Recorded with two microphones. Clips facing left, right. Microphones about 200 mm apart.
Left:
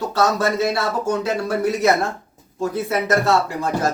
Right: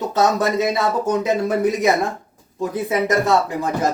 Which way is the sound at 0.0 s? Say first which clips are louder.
Right 1 dB; 20° right (ahead or behind).